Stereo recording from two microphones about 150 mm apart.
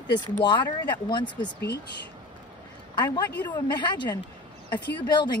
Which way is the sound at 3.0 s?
30° left (ahead or behind).